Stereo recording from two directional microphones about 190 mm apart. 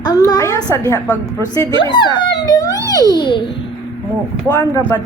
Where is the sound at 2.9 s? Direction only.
20° left (ahead or behind).